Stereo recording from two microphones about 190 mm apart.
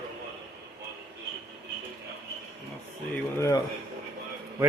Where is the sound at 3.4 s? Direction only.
20° left (ahead or behind).